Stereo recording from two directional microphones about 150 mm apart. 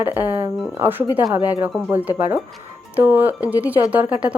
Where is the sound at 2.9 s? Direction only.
10° right (ahead or behind).